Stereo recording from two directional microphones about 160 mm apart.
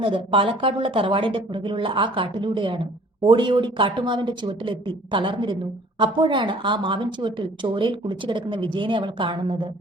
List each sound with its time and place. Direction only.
0.0 s a woman's voice: 30° right (ahead or behind)